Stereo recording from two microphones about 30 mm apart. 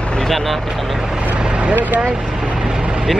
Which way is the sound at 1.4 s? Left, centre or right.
Right.